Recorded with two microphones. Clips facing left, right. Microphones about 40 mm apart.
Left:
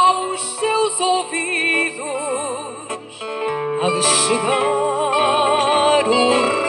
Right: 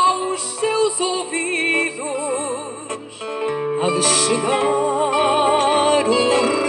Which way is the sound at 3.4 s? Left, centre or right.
Centre.